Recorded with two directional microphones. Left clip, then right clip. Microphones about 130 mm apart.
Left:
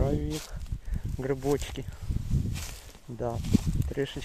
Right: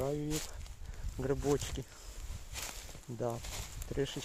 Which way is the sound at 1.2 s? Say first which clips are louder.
Left 4 dB; 40° left (ahead or behind).